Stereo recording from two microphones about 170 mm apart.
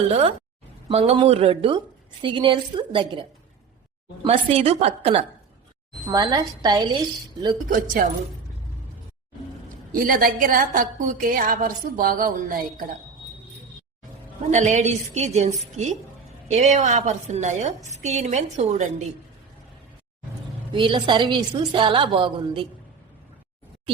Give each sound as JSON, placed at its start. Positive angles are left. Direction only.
{"t": 0.1, "sound": "a woman's voice", "side_deg": -35}
{"t": 6.1, "sound": "a woman's voice", "side_deg": -25}
{"t": 7.7, "sound": "a woman's voice", "side_deg": -55}
{"t": 9.9, "sound": "a woman's voice", "side_deg": -55}
{"t": 14.5, "sound": "a woman's voice", "side_deg": -45}
{"t": 20.7, "sound": "a woman's voice", "side_deg": -30}